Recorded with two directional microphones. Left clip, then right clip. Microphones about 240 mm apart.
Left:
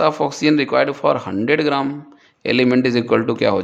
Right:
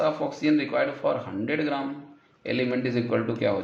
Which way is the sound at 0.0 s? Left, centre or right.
Left.